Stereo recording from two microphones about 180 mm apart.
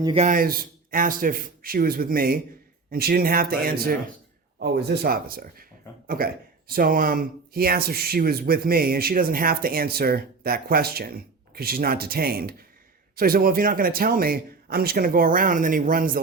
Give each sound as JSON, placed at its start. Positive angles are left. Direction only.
{"t": 0.0, "sound": "a man's voice", "side_deg": -30}
{"t": 0.3, "sound": "a man's voice", "side_deg": -55}